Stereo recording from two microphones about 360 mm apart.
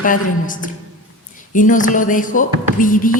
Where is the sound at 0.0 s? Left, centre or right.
Left.